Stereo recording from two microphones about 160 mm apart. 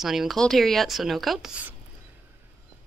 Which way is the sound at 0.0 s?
Centre (ahead or behind).